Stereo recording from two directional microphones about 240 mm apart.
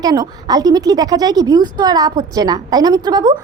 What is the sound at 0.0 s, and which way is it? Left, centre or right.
A woman's voice, centre.